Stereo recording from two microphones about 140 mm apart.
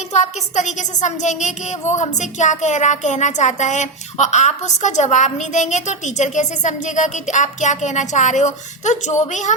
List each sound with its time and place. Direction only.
0.1 s a woman's voice: 55° left (ahead or behind)